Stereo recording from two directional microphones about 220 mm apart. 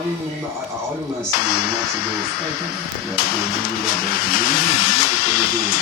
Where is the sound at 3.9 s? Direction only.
40° left (ahead or behind).